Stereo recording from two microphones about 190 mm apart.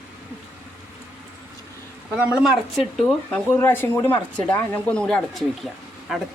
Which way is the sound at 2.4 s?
Centre (ahead or behind).